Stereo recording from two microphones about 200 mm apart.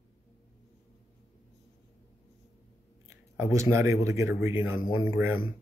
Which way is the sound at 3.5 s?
15° right (ahead or behind).